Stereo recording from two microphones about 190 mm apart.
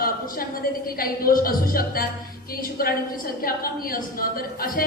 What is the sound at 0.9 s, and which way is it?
A woman's voice, 50° left (ahead or behind).